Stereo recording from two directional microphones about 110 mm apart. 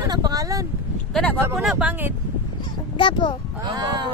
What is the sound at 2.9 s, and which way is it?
Speech, 45° left (ahead or behind).